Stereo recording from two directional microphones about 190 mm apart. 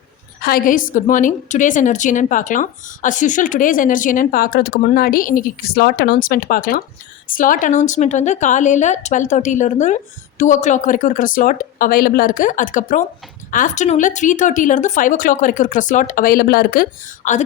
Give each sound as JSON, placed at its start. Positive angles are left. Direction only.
{"t": 0.4, "sound": "a woman's voice", "side_deg": 50}